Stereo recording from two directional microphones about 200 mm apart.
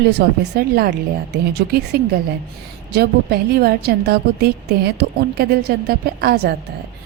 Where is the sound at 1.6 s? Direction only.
50° right (ahead or behind).